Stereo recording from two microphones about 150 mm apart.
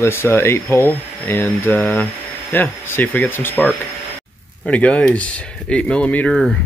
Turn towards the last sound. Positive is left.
turn(degrees=10)  # may be behind; listen again after turning